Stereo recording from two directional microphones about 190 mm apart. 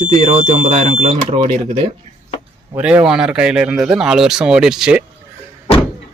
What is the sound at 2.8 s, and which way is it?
A man's voice, 5° right (ahead or behind).